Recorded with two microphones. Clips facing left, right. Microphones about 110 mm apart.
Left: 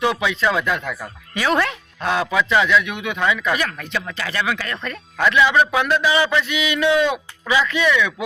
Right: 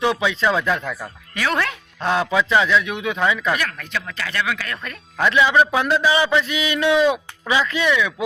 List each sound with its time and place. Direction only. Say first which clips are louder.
0.2 s speech: even; 25° right (ahead or behind)
0.7 s speech: right 1 dB; centre (ahead or behind)
2.0 s speech: right 1 dB; 30° right (ahead or behind)
3.5 s speech: left 1 dB; 5° left (ahead or behind)
5.5 s speech: even; 30° right (ahead or behind)
6.4 s a sound: left 1 dB; 35° right (ahead or behind)
6.9 s speech: right 3 dB; 5° right (ahead or behind)
7.4 s speech: left 1 dB; 30° right (ahead or behind)
7.9 s speech: even; 15° right (ahead or behind)